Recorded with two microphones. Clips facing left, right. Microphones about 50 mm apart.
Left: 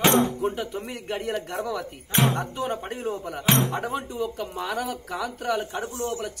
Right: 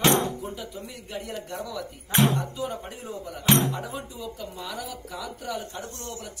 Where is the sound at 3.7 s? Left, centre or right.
Left.